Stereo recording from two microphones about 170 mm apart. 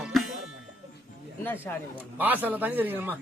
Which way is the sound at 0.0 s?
Centre (ahead or behind).